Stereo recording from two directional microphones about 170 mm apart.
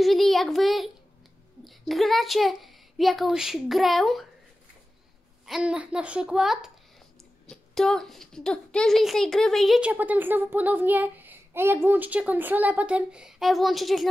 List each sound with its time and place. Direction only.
0.0 s a child's voice: centre (ahead or behind)
5.4 s a child's voice: 5° right (ahead or behind)